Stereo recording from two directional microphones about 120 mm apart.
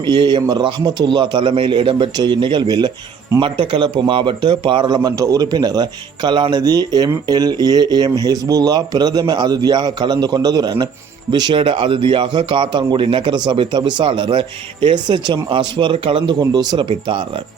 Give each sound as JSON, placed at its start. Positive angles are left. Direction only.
{"t": 0.0, "sound": "a man's voice", "side_deg": -40}
{"t": 3.4, "sound": "a man's voice", "side_deg": -45}